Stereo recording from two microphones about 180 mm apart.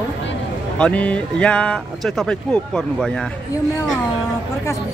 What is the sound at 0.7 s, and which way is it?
Speech, 5° left (ahead or behind).